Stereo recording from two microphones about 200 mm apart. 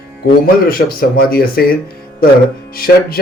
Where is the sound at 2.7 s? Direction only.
50° left (ahead or behind).